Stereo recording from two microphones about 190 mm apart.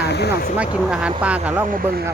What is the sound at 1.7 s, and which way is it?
Speech, 50° right (ahead or behind).